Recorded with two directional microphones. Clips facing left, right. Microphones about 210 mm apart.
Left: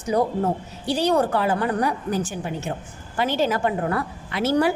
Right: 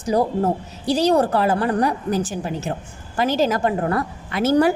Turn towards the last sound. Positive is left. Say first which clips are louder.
# right 4 dB
turn(degrees=-45)  # may be behind; listen again after turning